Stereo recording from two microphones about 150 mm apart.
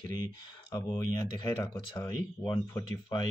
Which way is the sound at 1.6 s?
25° left (ahead or behind).